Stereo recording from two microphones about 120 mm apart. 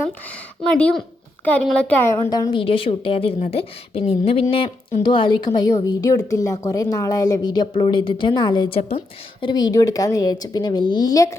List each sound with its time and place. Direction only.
0.7 s a woman's voice: 10° left (ahead or behind)
2.3 s speech: 35° left (ahead or behind)
2.6 s a woman's voice: 50° left (ahead or behind)
9.4 s speech: 35° left (ahead or behind)